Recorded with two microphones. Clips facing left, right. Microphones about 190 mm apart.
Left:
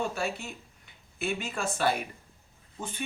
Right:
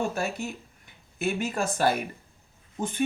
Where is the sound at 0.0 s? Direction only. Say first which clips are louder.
Right 3 dB; 45° right (ahead or behind).